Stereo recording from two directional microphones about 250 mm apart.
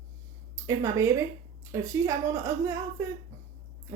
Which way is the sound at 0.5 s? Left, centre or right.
Centre.